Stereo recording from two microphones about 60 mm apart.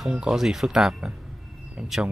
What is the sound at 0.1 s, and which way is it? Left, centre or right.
Speech, centre.